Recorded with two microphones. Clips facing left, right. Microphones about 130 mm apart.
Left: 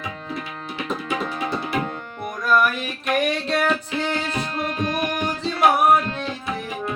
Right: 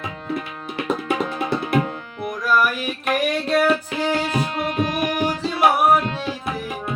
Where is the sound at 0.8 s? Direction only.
55° right (ahead or behind).